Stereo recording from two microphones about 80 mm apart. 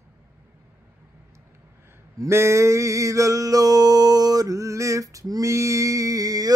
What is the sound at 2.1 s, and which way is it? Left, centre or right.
Male singing, right.